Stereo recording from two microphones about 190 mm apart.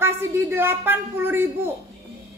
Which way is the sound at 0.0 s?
10° right (ahead or behind).